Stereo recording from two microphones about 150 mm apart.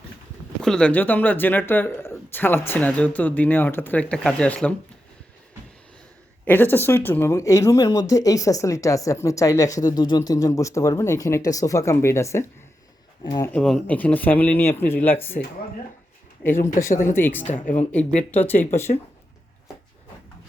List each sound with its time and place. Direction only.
0.6 s speech: 5° left (ahead or behind)
6.4 s speech: 15° left (ahead or behind)
13.5 s speech: 5° left (ahead or behind)
16.4 s speech: 15° left (ahead or behind)
16.9 s speech: 60° left (ahead or behind)
17.2 s speech: 15° left (ahead or behind)
17.4 s speech: 55° left (ahead or behind)
18.3 s speech: 10° left (ahead or behind)